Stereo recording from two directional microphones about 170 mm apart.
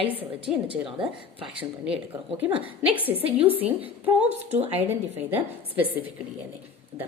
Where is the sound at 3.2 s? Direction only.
35° right (ahead or behind).